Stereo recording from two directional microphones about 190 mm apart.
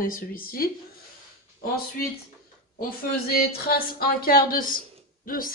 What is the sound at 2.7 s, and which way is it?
Speech, 50° left (ahead or behind).